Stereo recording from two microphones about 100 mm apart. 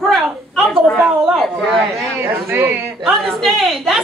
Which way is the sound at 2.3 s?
20° right (ahead or behind).